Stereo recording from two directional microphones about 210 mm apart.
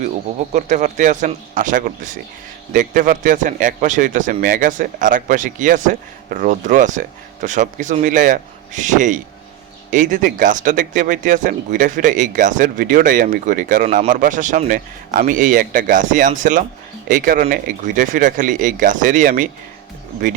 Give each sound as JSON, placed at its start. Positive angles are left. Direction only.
{"t": 0.5, "sound": "speech", "side_deg": -35}